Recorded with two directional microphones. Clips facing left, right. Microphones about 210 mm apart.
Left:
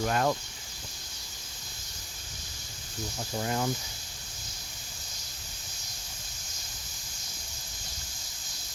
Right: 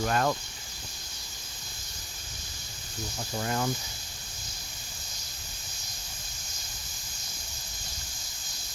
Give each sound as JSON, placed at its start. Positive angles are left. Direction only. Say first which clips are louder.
{"t": 0.0, "sound": "speech", "louder": "even", "side_deg": 15}
{"t": 3.3, "sound": "speech", "louder": "even", "side_deg": 15}